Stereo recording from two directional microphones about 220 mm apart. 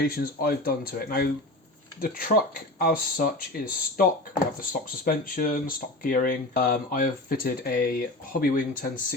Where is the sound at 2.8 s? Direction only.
40° left (ahead or behind).